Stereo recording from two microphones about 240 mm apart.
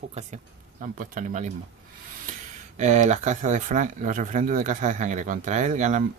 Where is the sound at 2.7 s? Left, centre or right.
Right.